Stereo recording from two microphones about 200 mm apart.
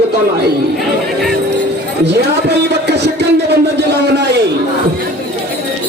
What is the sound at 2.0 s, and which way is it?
Music, 55° right (ahead or behind).